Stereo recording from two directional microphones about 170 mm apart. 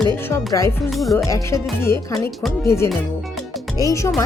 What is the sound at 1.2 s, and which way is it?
Speech, 15° left (ahead or behind).